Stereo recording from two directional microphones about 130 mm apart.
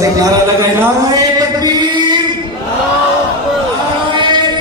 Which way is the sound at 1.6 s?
30° right (ahead or behind).